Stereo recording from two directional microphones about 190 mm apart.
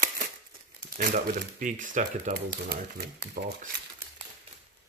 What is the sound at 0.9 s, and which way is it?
Speech, 40° right (ahead or behind).